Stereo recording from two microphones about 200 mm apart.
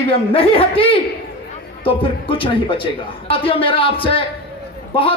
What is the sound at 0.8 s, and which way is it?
A man's voice, 25° left (ahead or behind).